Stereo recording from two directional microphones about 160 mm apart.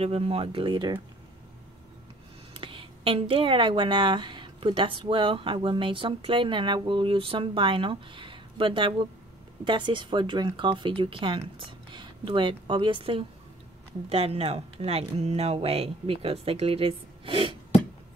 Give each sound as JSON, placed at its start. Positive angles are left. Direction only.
{"t": 0.0, "sound": "speech", "side_deg": -35}
{"t": 2.5, "sound": "speech", "side_deg": -35}